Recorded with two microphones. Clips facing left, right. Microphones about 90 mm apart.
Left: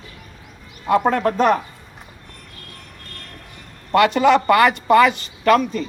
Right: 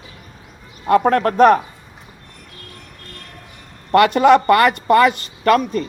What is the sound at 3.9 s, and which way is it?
Speech, 55° right (ahead or behind).